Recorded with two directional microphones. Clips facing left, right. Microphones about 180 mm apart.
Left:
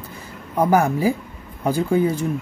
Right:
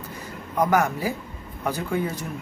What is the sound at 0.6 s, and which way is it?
Speech, 30° left (ahead or behind).